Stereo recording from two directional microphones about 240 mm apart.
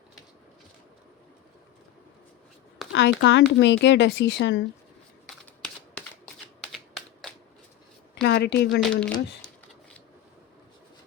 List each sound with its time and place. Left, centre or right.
2.9 s speech: left
6.2 s shuffling cards: centre
8.2 s a woman's voice: left
8.8 s speech: centre